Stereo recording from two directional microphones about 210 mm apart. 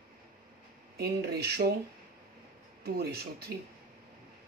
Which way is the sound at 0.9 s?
50° right (ahead or behind).